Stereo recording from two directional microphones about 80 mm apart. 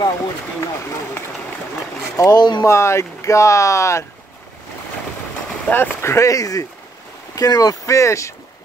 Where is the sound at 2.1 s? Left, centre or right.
Left.